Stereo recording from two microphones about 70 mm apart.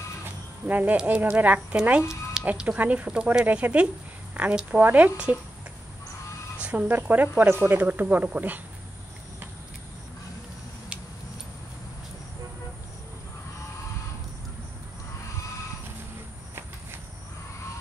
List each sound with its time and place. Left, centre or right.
0.7 s speech: right
6.6 s a sound: centre
6.9 s speech: right